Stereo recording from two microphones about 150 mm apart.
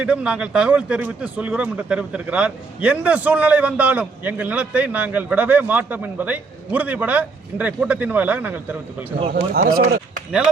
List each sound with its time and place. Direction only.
0.0 s speech: 5° right (ahead or behind)
9.3 s a man's voice: 70° right (ahead or behind)